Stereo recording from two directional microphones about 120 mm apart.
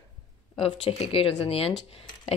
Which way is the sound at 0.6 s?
50° left (ahead or behind).